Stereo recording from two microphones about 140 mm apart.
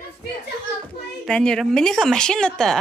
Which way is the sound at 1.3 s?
5° left (ahead or behind).